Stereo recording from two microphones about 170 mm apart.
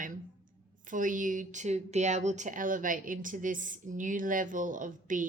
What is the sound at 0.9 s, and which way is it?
A woman's voice, 50° right (ahead or behind).